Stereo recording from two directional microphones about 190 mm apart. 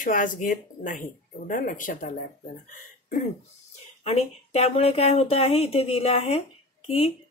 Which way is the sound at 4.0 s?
35° left (ahead or behind).